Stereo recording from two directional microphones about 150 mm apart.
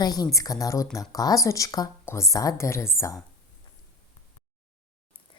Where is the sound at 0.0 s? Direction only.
25° left (ahead or behind).